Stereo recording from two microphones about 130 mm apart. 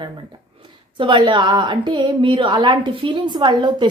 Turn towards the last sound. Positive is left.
turn(degrees=-35)  # may be behind; listen again after turning